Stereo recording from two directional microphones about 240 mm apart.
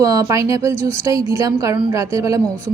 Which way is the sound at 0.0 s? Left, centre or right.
Centre.